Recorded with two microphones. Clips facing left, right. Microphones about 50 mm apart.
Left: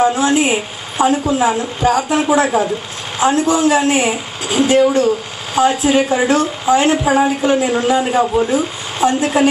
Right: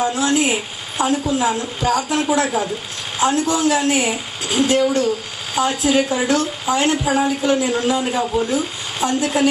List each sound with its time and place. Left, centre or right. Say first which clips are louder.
0.0 s a woman's voice: left 4 dB; centre
3.4 s a woman's voice: left 4 dB; left
5.0 s a sound: left 4 dB; left
5.7 s a woman's voice: left 2 dB; left